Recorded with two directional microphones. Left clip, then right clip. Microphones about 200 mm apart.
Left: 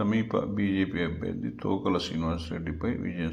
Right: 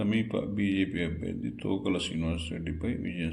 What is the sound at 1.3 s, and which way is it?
Speech, 5° right (ahead or behind).